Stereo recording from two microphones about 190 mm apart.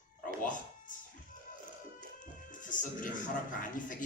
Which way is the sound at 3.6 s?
45° left (ahead or behind).